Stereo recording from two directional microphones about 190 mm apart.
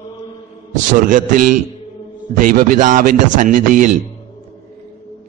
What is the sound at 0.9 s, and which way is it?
A man's voice, 45° right (ahead or behind).